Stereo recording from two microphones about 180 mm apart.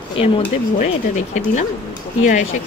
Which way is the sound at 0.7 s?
45° left (ahead or behind).